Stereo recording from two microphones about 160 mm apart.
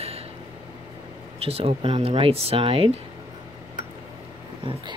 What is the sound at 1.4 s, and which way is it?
Speech, 40° right (ahead or behind).